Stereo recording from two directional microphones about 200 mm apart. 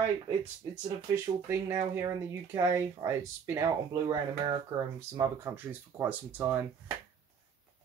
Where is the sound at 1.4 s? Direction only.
15° right (ahead or behind).